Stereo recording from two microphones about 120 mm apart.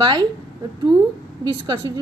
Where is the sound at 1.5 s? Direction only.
40° right (ahead or behind).